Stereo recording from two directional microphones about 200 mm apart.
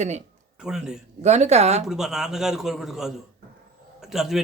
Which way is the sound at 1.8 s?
Centre (ahead or behind).